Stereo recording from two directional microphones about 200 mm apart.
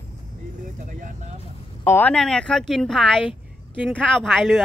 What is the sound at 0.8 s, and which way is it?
Speech, 40° right (ahead or behind).